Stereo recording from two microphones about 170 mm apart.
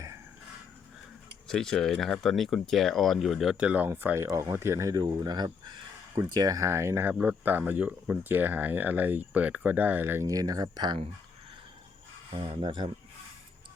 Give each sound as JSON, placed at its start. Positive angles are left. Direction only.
{"t": 1.5, "sound": "speech", "side_deg": 5}
{"t": 12.3, "sound": "speech", "side_deg": -30}